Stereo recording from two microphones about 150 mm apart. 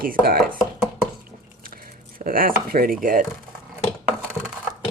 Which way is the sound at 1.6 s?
75° right (ahead or behind).